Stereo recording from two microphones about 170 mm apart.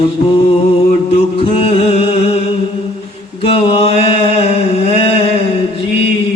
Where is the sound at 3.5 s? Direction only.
35° left (ahead or behind).